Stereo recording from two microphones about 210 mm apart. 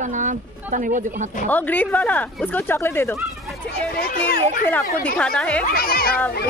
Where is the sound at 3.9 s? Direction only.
45° left (ahead or behind).